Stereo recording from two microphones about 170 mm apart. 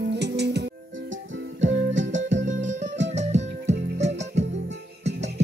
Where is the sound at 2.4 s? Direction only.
45° right (ahead or behind).